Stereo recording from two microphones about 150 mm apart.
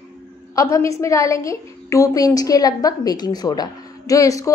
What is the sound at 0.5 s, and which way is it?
A woman's voice, 20° left (ahead or behind).